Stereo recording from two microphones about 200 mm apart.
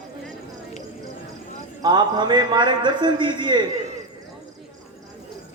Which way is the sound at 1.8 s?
20° right (ahead or behind).